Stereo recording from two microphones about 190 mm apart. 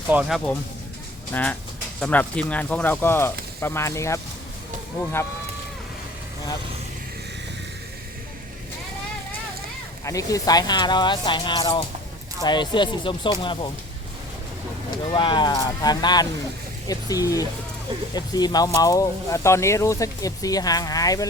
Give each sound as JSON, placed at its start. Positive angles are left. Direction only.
{"t": 0.1, "sound": "speech", "side_deg": -5}
{"t": 10.0, "sound": "speech", "side_deg": 15}
{"t": 14.8, "sound": "speech", "side_deg": 25}